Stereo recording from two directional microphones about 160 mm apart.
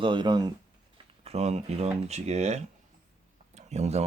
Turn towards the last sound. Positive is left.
turn(degrees=-45)  # may be behind; listen again after turning